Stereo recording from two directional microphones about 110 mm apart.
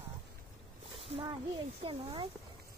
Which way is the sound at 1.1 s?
65° right (ahead or behind).